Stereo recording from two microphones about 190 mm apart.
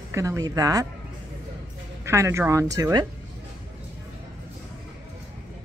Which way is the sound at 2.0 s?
15° right (ahead or behind).